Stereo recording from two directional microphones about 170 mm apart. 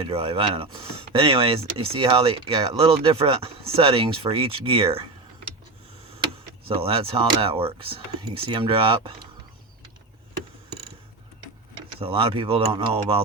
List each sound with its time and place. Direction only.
0.0 s speech: 35° right (ahead or behind)
6.7 s speech: 35° right (ahead or behind)
11.9 s speech: 35° right (ahead or behind)